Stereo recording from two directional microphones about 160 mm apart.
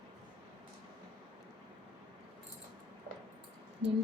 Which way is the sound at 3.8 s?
90° right.